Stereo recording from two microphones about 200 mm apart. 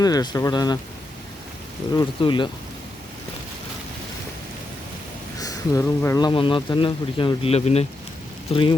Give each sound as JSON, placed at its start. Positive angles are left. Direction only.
{"t": 0.0, "sound": "speech", "side_deg": 20}
{"t": 2.0, "sound": "speech", "side_deg": 25}
{"t": 5.4, "sound": "speech", "side_deg": 15}